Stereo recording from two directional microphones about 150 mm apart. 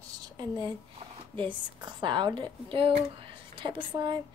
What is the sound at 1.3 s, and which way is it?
A woman's voice, 30° right (ahead or behind).